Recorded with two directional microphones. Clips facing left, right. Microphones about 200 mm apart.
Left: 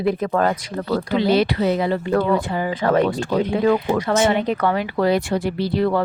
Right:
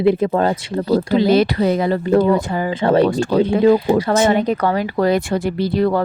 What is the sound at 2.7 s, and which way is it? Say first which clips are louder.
Speech: right 4 dB; 30° right (ahead or behind).